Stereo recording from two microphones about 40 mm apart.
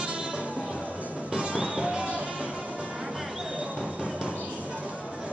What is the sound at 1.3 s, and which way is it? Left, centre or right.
Music, right.